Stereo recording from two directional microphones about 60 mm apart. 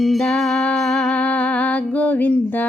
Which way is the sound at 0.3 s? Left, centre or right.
Centre.